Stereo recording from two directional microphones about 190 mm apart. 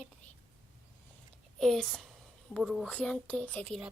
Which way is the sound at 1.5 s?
Centre (ahead or behind).